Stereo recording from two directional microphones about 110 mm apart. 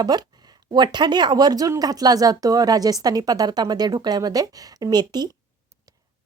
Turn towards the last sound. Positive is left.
turn(degrees=-40)  # may be behind; listen again after turning